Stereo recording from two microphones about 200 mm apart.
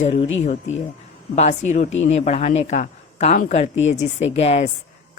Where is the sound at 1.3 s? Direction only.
35° left (ahead or behind).